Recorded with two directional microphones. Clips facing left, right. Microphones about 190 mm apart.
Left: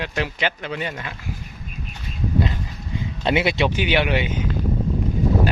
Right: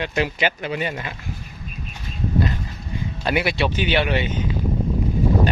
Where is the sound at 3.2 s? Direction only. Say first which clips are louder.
Left 2 dB; 25° left (ahead or behind).